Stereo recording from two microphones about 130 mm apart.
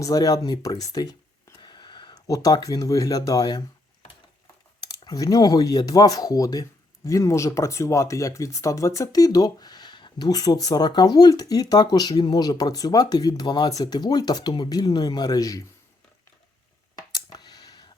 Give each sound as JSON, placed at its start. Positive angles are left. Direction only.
{"t": 0.0, "sound": "speech", "side_deg": 30}
{"t": 4.8, "sound": "speech", "side_deg": 30}
{"t": 17.1, "sound": "a sound", "side_deg": 30}